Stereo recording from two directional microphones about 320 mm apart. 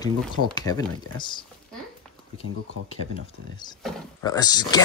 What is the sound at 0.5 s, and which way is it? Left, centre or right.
Speech, centre.